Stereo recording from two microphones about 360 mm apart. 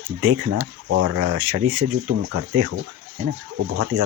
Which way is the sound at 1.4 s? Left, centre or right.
Right.